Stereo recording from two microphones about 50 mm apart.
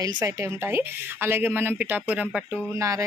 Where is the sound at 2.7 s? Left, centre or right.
Right.